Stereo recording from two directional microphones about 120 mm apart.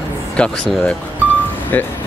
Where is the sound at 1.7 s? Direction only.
15° left (ahead or behind).